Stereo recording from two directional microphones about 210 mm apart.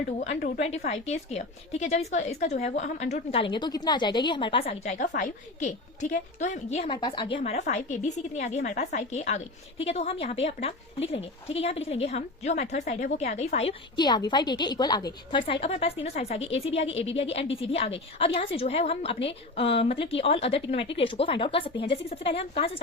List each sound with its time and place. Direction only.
0.2 s a woman's voice: 40° left (ahead or behind)